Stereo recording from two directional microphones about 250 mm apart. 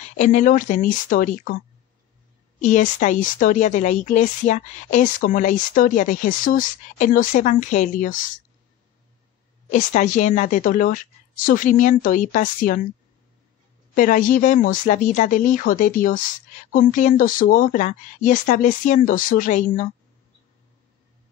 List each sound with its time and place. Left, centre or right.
0.2 s speech: left
2.6 s speech: left
9.7 s speech: left
13.9 s speech: left